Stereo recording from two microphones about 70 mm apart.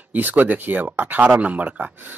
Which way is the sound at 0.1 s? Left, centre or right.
Right.